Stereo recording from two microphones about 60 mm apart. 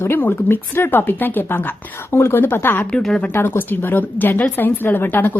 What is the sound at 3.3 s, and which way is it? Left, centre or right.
A woman's voice, left.